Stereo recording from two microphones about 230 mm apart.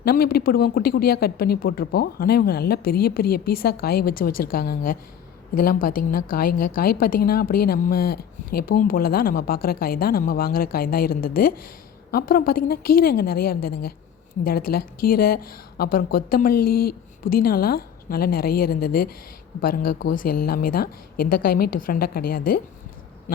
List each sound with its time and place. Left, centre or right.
0.0 s speech: left
14.7 s speech: left
16.6 s speech: left
16.8 s speech: left